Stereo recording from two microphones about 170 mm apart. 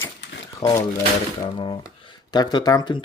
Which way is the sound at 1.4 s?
30° left (ahead or behind).